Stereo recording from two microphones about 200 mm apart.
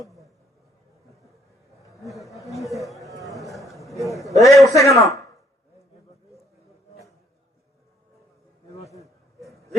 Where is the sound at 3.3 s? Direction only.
Centre (ahead or behind).